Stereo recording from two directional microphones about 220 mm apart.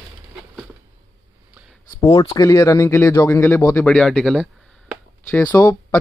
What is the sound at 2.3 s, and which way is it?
Speech, 15° left (ahead or behind).